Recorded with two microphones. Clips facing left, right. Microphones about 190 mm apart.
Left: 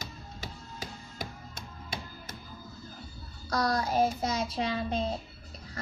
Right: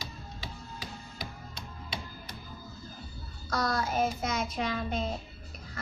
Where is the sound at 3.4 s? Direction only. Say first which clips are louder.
Left 2 dB; 35° left (ahead or behind).